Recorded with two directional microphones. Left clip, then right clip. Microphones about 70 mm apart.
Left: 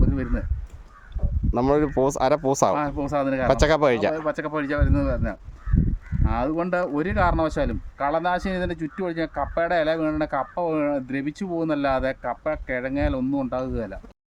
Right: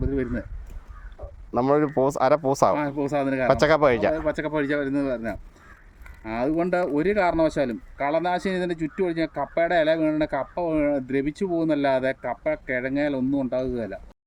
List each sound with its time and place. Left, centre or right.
0.0 s a sound: left
1.5 s speech: left
2.7 s speech: left
3.4 s speech: centre
4.3 s speech: left
12.2 s speech: left